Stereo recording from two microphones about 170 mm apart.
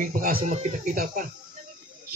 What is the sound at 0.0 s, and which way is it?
Speech, 55° right (ahead or behind).